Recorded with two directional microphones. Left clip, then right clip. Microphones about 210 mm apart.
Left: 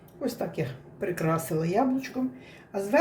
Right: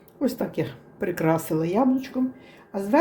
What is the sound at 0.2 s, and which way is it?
Speech, 40° right (ahead or behind).